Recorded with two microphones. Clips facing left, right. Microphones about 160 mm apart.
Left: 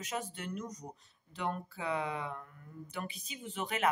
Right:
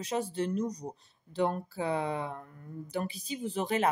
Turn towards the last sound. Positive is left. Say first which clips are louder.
# right 5 dB
turn(degrees=-35)  # may be behind; listen again after turning